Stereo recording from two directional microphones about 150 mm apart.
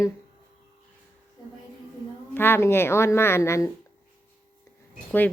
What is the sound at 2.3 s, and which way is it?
Speech, 15° left (ahead or behind).